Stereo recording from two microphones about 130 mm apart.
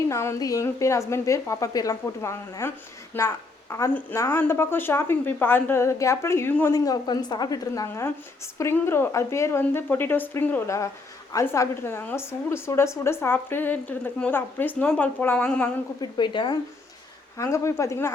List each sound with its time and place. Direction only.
0.1 s a woman's voice: 20° left (ahead or behind)
16.0 s speech: 35° left (ahead or behind)
17.3 s a woman's voice: 25° left (ahead or behind)